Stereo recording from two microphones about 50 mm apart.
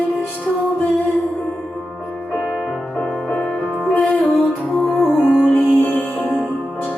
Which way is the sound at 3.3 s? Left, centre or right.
Left.